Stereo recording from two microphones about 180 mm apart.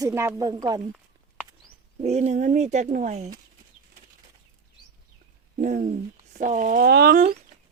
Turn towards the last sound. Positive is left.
turn(degrees=-60)  # may be behind; listen again after turning